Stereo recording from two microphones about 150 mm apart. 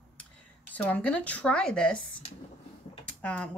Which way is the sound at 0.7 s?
10° left (ahead or behind).